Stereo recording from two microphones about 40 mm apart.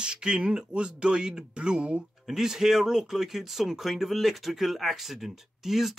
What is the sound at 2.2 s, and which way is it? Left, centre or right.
Speech, centre.